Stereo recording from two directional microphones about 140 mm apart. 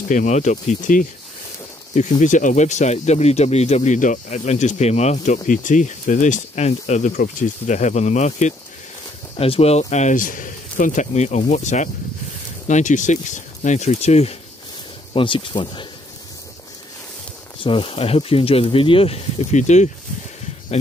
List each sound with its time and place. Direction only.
0.1 s speech: 60° left (ahead or behind)
9.4 s speech: 45° left (ahead or behind)
15.1 s speech: 35° left (ahead or behind)
17.6 s speech: 40° left (ahead or behind); by 19.9 s 55° left (ahead or behind)